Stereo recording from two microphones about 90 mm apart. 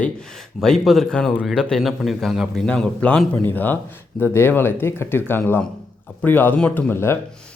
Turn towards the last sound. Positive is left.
turn(degrees=25)  # may be behind; listen again after turning